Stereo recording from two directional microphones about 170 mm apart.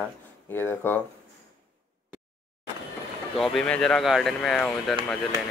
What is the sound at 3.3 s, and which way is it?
Speech, centre (ahead or behind).